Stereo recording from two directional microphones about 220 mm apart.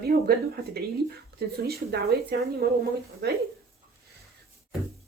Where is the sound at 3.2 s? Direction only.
50° right (ahead or behind).